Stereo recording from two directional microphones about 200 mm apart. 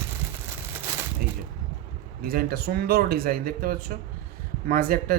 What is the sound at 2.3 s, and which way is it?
Speech, 50° right (ahead or behind).